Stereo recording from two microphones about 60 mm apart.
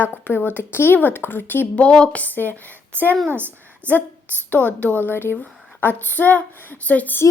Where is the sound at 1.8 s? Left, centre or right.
Centre.